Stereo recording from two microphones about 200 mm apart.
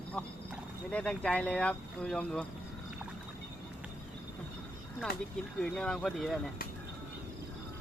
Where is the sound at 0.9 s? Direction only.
5° left (ahead or behind).